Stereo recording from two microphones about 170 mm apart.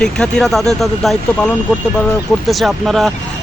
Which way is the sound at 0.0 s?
5° left (ahead or behind).